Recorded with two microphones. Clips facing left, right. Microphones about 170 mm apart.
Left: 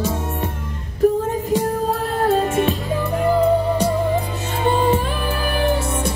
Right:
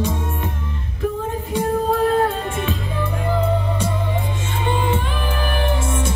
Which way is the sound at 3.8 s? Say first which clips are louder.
Left 5 dB; 40° left (ahead or behind).